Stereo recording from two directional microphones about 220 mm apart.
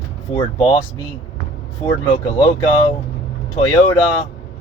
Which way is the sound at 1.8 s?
20° left (ahead or behind).